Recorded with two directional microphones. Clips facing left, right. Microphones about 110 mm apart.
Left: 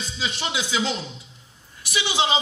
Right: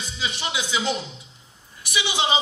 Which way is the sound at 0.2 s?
15° right (ahead or behind).